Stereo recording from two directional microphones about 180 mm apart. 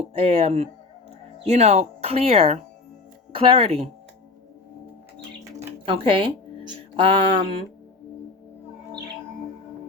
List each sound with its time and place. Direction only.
0.2 s speech: 35° right (ahead or behind)
5.9 s mantra: 30° right (ahead or behind)